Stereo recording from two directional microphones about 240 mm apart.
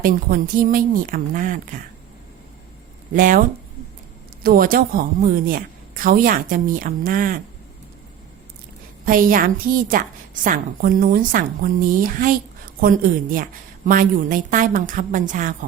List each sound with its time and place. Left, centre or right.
0.0 s a woman's voice: right
3.2 s a woman's voice: right
4.4 s a woman's voice: right
9.0 s a woman's voice: right